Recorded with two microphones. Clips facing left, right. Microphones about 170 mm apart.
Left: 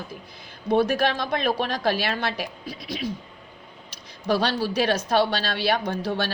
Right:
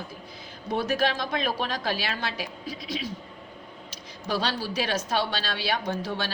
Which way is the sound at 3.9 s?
60° left (ahead or behind).